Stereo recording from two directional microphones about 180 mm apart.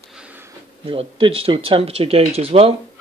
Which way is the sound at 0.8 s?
30° right (ahead or behind).